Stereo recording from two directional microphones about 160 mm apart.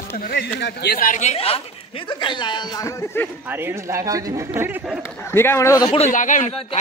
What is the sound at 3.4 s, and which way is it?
A man's voice, 15° right (ahead or behind).